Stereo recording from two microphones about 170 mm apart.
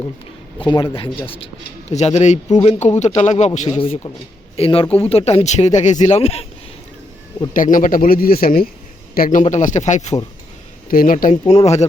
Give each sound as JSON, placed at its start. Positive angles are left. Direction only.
{"t": 0.6, "sound": "speech", "side_deg": 30}
{"t": 1.9, "sound": "speech", "side_deg": 40}
{"t": 7.5, "sound": "a man's voice", "side_deg": 50}
{"t": 10.8, "sound": "speech", "side_deg": 55}
{"t": 11.4, "sound": "speech", "side_deg": 40}